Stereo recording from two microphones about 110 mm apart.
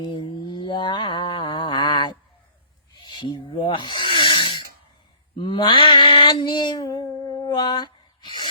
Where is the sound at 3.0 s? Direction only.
45° left (ahead or behind).